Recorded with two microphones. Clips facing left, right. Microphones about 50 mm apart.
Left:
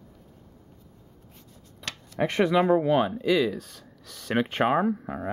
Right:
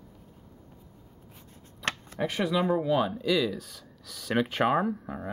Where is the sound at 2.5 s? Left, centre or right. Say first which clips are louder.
Left 4 dB; left.